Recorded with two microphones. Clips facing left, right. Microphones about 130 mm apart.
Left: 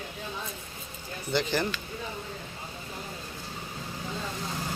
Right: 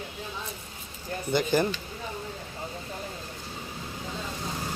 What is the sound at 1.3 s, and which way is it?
Speech, 15° right (ahead or behind).